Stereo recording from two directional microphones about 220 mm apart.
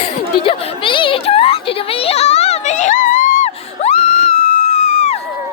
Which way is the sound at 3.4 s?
30° left (ahead or behind).